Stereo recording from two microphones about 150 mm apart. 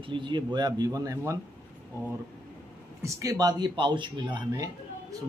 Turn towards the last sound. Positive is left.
turn(degrees=-25)  # may be behind; listen again after turning